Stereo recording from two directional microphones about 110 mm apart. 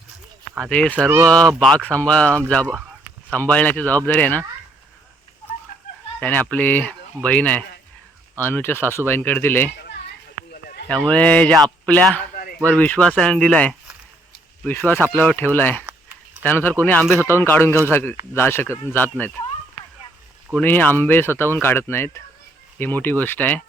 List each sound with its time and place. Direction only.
0.6 s speech: 10° left (ahead or behind)
0.9 s speech: 15° right (ahead or behind)
1.3 s speech: 5° left (ahead or behind)
6.1 s speech: 15° left (ahead or behind)
10.8 s speech: 10° left (ahead or behind)
15.9 s a sound: 15° right (ahead or behind)
16.4 s speech: 20° left (ahead or behind)
20.6 s speech: 15° left (ahead or behind)